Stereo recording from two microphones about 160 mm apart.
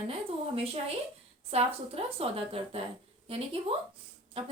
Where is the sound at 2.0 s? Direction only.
35° right (ahead or behind).